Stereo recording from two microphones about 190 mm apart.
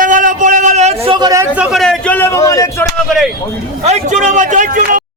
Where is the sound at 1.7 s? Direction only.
Centre (ahead or behind); by 2.8 s 15° left (ahead or behind).